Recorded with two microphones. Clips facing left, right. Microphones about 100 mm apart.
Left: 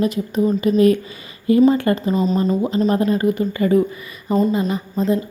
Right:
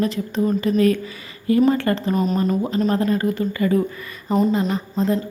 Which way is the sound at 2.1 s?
5° right (ahead or behind).